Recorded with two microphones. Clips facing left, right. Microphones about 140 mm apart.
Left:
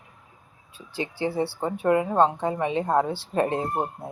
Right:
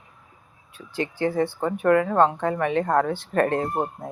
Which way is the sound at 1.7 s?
20° left (ahead or behind).